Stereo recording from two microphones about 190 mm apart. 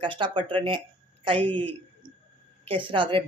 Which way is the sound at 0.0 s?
25° right (ahead or behind).